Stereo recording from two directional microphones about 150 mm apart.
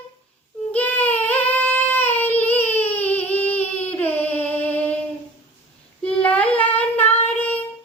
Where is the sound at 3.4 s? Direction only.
45° left (ahead or behind).